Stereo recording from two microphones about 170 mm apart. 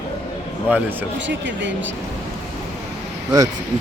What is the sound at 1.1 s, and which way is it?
Speech, 90° right.